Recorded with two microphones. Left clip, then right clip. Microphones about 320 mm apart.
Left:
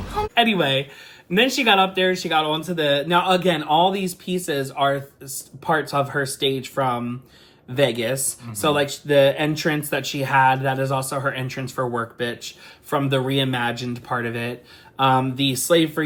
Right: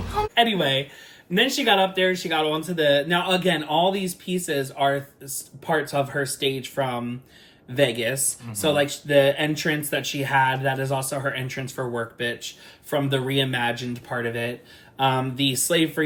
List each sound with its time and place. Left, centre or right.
0.0 s music: centre
0.3 s speech: centre